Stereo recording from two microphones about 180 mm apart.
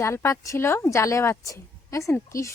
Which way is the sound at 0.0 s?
15° left (ahead or behind).